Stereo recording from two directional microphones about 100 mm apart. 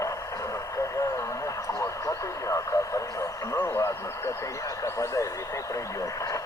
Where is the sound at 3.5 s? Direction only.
20° left (ahead or behind).